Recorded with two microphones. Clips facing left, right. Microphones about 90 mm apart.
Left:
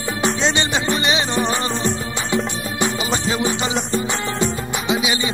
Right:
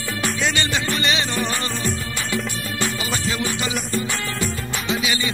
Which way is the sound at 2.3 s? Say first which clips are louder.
Left 5 dB; 20° left (ahead or behind).